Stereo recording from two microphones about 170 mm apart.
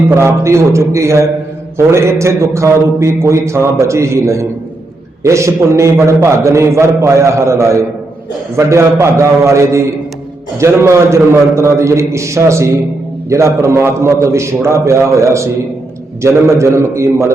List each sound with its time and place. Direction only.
0.2 s a man's voice: 15° right (ahead or behind)